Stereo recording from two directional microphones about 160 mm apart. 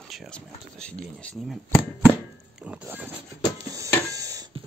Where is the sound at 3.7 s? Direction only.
20° right (ahead or behind).